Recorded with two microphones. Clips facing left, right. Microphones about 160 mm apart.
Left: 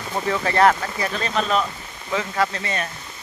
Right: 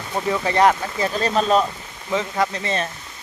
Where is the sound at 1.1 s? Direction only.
35° right (ahead or behind).